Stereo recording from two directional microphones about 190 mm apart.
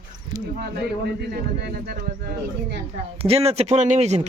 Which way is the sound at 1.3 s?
55° right (ahead or behind).